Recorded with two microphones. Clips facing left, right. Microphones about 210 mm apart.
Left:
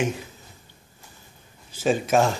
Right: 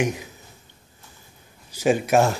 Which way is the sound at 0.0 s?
15° right (ahead or behind).